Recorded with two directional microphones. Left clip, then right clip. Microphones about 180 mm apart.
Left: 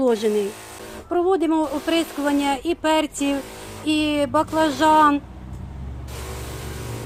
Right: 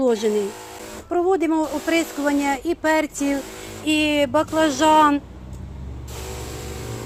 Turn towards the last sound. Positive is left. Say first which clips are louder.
# even
turn(degrees=-15)  # may be behind; listen again after turning